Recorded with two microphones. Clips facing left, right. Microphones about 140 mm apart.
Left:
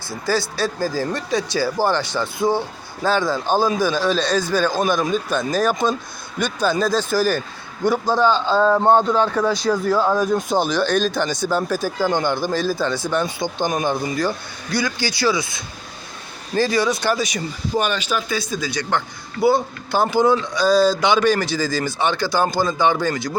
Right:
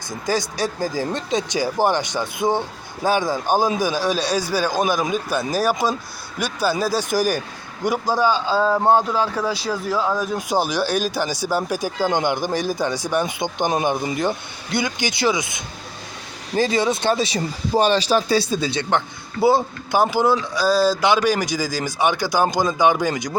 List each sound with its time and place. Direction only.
0.1 s speech: 15° right (ahead or behind)
19.9 s speech: 10° right (ahead or behind)